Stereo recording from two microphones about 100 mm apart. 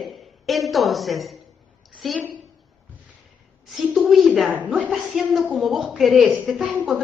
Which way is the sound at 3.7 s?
Centre (ahead or behind).